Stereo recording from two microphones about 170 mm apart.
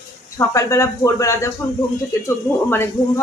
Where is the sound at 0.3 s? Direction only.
15° left (ahead or behind).